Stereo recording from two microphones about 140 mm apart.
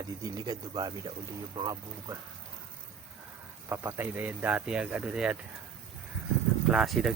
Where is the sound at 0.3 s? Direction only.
30° right (ahead or behind).